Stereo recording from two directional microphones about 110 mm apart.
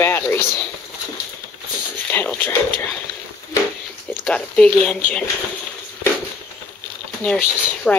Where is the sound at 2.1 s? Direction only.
20° left (ahead or behind).